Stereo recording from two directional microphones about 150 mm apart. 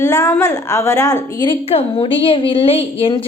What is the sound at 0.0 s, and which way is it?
A woman's voice, 20° left (ahead or behind).